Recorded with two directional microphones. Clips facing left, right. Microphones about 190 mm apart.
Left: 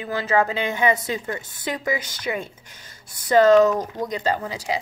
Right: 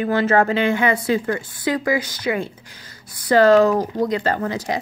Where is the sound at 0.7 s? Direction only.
15° left (ahead or behind).